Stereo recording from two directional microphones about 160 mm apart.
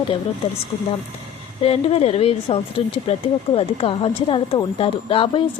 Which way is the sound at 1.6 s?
35° left (ahead or behind).